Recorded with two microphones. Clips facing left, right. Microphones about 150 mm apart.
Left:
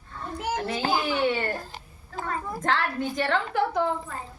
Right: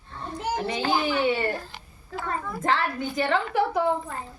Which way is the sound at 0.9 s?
Centre (ahead or behind).